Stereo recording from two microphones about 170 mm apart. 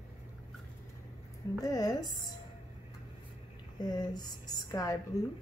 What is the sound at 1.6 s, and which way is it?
Speech, 20° left (ahead or behind).